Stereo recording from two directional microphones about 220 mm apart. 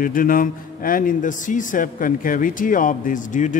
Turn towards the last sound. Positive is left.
turn(degrees=35)  # may be behind; listen again after turning